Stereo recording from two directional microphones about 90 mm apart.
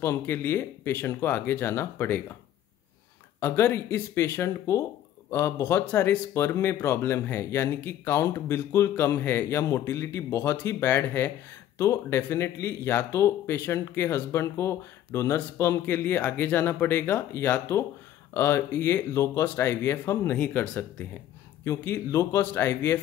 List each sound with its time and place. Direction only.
0.0 s speech: 30° left (ahead or behind)
3.3 s speech: 30° left (ahead or behind)
11.8 s speech: 35° left (ahead or behind)